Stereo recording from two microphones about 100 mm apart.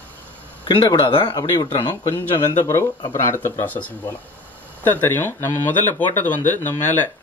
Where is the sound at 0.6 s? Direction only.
50° left (ahead or behind).